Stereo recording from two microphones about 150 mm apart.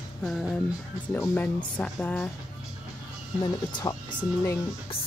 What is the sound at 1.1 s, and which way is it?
Speech, 10° left (ahead or behind).